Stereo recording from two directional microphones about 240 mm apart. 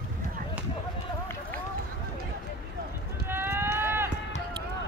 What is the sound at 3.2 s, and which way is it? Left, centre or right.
Run, centre.